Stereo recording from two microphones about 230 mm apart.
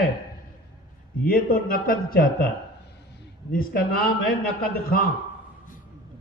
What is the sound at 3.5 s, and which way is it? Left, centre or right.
A man's voice, left.